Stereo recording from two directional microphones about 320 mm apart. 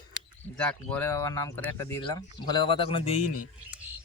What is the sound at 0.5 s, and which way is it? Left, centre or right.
Speech, centre.